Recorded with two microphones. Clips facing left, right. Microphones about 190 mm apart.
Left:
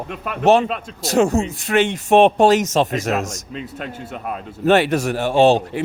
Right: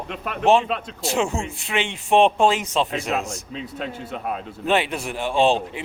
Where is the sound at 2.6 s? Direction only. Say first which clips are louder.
Left 5 dB; 45° left (ahead or behind).